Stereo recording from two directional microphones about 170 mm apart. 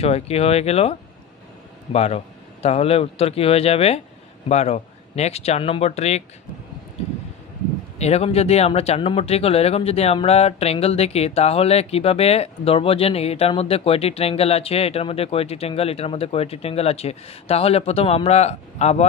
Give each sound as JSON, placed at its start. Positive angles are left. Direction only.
{"t": 0.0, "sound": "speech", "side_deg": 35}
{"t": 8.0, "sound": "speech", "side_deg": 40}